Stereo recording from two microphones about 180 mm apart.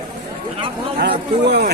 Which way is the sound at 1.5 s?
65° right (ahead or behind).